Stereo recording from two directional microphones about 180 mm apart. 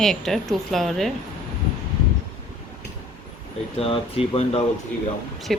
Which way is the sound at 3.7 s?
30° left (ahead or behind).